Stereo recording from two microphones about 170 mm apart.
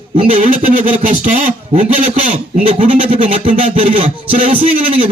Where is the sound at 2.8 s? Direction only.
35° right (ahead or behind).